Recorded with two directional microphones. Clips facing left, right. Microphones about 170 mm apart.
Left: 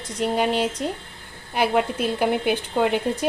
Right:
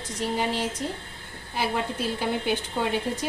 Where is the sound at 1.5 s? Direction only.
65° left (ahead or behind).